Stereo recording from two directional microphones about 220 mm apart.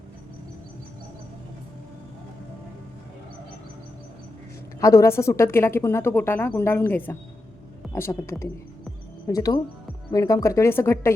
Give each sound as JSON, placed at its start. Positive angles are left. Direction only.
{"t": 4.8, "sound": "a woman's voice", "side_deg": 15}